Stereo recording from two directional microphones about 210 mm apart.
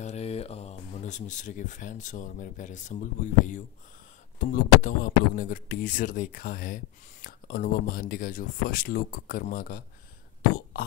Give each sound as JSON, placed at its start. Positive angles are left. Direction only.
{"t": 0.0, "sound": "speech", "side_deg": 30}